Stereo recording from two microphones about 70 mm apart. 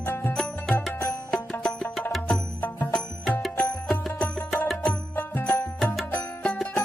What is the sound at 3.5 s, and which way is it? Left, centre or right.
Music, left.